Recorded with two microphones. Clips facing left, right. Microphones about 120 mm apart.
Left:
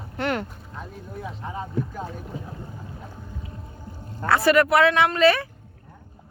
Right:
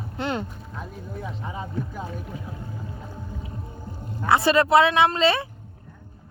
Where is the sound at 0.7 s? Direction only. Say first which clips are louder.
Even; centre (ahead or behind).